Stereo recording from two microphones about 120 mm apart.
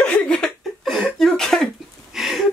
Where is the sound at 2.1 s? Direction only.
Centre (ahead or behind).